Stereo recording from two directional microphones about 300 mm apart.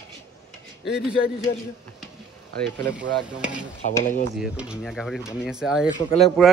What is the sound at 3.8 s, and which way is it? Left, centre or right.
Speech, left.